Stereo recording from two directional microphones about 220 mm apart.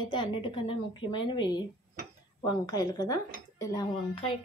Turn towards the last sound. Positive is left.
turn(degrees=20)  # may be behind; listen again after turning